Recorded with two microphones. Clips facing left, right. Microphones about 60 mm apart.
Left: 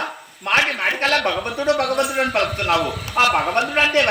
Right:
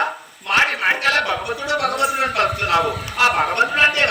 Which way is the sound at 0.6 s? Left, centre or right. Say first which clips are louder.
Right 3 dB; right.